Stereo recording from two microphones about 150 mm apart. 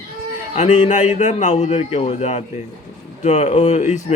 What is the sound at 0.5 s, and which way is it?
Speech, 50° left (ahead or behind).